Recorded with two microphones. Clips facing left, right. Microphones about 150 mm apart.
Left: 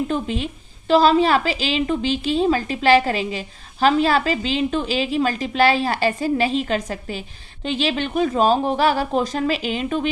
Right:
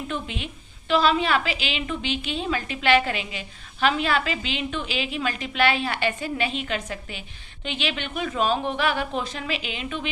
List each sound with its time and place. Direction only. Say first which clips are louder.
0.1 s a woman's voice: left 8 dB; 35° left (ahead or behind)